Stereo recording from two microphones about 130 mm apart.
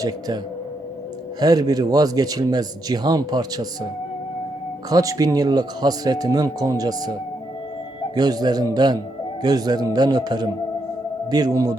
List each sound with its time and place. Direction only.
1.4 s speech: 30° right (ahead or behind)
4.9 s a man's voice: 30° right (ahead or behind)